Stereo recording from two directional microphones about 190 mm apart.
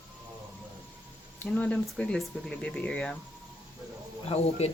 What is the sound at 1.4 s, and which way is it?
Speech, 5° left (ahead or behind).